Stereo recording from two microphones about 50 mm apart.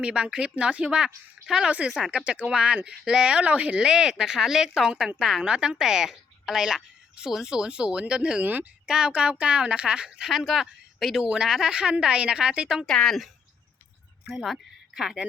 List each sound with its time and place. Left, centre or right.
0.0 s speech: centre
3.8 s a woman's voice: centre
10.2 s speech: centre
11.2 s speech: centre
12.8 s a woman's voice: centre
15.0 s a woman's voice: centre